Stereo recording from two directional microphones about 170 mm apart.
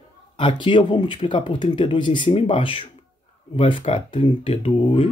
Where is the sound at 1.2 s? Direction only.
30° left (ahead or behind).